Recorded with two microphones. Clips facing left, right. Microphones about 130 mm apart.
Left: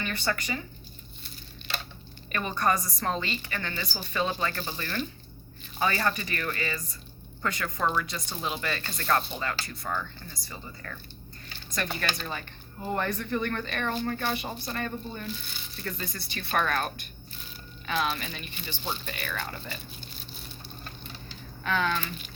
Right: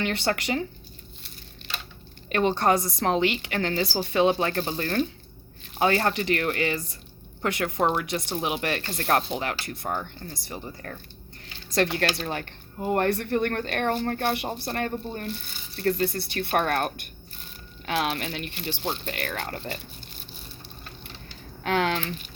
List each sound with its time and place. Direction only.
0.0 s speech: 70° right (ahead or behind)
2.6 s speech: 65° right (ahead or behind)
5.8 s speech: 60° right (ahead or behind)
9.8 s speech: 30° right (ahead or behind)
10.2 s speech: 60° right (ahead or behind)
11.7 s speech: 75° right (ahead or behind)
12.3 s speech: 65° right (ahead or behind)
21.6 s speech: 65° right (ahead or behind)